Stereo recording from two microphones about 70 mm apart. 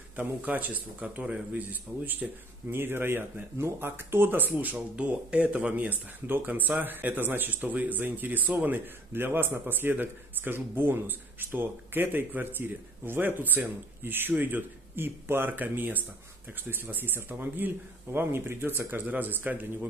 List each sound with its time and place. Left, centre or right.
0.1 s speech: right